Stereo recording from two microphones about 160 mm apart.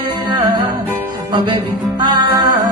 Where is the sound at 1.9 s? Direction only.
30° right (ahead or behind).